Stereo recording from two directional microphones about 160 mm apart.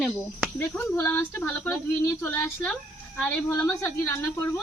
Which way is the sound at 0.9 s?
15° left (ahead or behind).